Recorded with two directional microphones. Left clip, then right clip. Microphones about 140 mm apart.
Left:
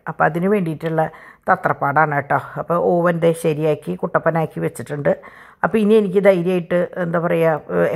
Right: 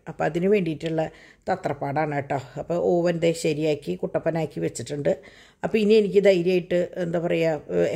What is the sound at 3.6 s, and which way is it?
Speech, 40° left (ahead or behind).